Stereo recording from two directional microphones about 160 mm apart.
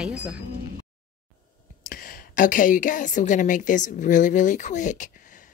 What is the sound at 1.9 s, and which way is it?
A woman's voice, 65° left (ahead or behind).